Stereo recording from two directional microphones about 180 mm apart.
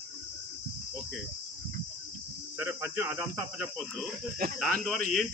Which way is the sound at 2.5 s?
10° right (ahead or behind).